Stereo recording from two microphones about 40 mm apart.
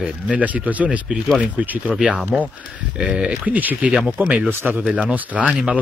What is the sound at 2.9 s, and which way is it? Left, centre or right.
Speech, right.